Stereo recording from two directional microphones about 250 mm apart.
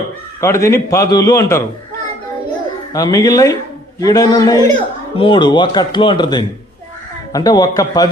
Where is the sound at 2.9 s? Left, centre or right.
Centre.